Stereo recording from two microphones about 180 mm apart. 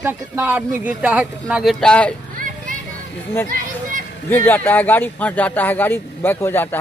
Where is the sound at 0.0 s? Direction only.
10° right (ahead or behind).